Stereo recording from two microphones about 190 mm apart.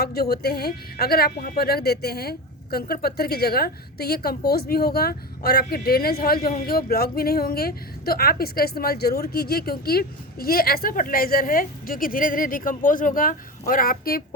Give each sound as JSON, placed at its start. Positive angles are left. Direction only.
{"t": 0.0, "sound": "a woman's voice", "side_deg": 55}